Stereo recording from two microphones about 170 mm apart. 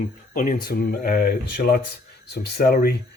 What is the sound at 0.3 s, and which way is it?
Speech, 50° left (ahead or behind).